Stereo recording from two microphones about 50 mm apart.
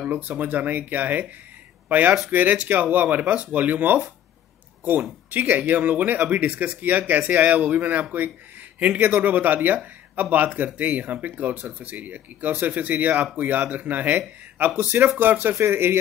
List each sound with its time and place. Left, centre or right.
0.1 s speech: right
5.3 s speech: right
15.5 s speech: right